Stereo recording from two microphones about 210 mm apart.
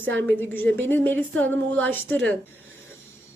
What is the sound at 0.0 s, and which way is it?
Speech, 65° right (ahead or behind).